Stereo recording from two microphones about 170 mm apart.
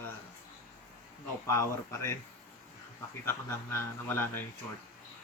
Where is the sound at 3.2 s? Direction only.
15° left (ahead or behind).